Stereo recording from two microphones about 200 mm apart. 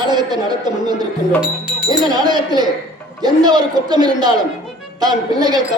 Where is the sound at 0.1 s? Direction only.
20° right (ahead or behind).